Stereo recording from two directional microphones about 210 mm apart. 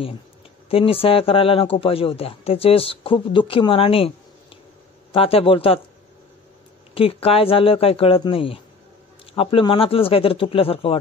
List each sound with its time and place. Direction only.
0.7 s speech: 25° left (ahead or behind)
5.1 s speech: 25° left (ahead or behind)
6.9 s speech: 25° left (ahead or behind)